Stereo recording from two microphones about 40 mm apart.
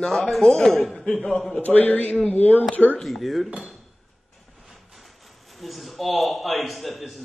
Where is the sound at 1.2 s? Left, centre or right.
Left.